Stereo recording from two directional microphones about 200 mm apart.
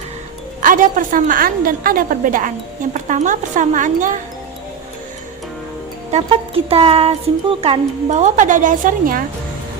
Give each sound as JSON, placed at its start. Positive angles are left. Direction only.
{"t": 0.6, "sound": "a woman's voice", "side_deg": -45}
{"t": 6.1, "sound": "a woman's voice", "side_deg": -30}